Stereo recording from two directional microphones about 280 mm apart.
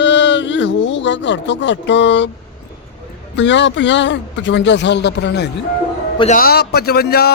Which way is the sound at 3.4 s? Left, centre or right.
Left.